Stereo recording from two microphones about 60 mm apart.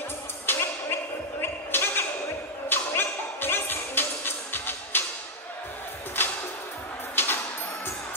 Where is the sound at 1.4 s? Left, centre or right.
Left.